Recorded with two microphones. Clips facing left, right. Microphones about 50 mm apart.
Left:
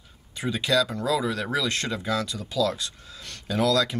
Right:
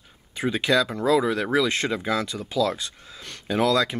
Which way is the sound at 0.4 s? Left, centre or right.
Right.